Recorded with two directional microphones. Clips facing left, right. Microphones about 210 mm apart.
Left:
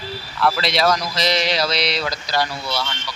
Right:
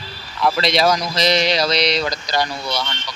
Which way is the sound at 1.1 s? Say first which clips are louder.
Right 3 dB; 5° left (ahead or behind).